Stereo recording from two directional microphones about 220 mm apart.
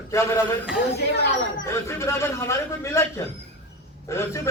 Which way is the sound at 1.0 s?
50° left (ahead or behind).